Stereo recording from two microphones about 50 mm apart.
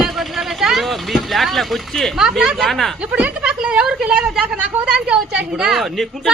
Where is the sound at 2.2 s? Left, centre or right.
Centre.